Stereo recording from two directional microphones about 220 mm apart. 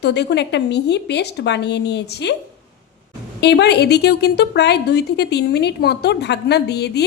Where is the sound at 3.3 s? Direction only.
50° left (ahead or behind).